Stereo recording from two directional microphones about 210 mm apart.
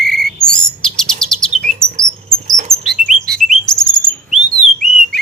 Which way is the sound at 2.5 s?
35° right (ahead or behind).